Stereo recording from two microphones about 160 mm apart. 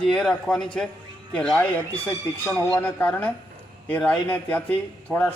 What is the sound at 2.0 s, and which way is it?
A man's voice, 15° left (ahead or behind).